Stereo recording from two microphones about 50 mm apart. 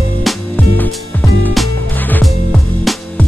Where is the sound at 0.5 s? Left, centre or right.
Left.